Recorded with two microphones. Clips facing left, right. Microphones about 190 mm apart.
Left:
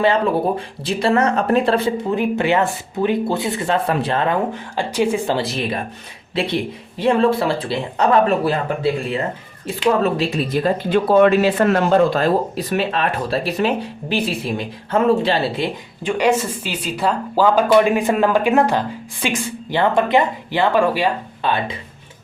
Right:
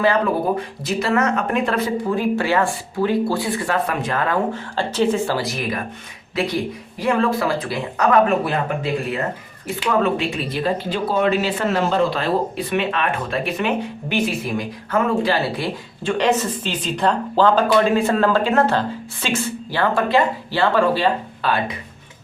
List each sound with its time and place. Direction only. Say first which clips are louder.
0.9 s speech: left 3 dB; 30° left (ahead or behind)
16.1 s speech: left 1 dB; 10° left (ahead or behind)